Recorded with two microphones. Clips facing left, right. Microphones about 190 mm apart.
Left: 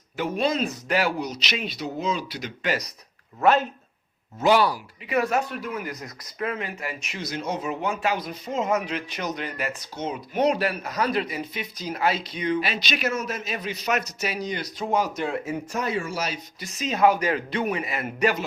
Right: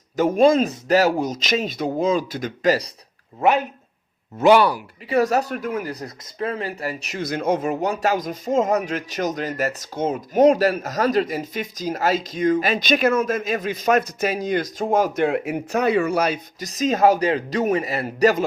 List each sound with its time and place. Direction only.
0.2 s speech: 45° right (ahead or behind)
3.4 s speech: 15° right (ahead or behind)
4.4 s speech: 60° right (ahead or behind)
5.0 s a man's voice: 35° right (ahead or behind)
5.8 s a man's voice: 35° right (ahead or behind)
7.2 s speech: 55° right (ahead or behind)
16.6 s a man's voice: 40° right (ahead or behind)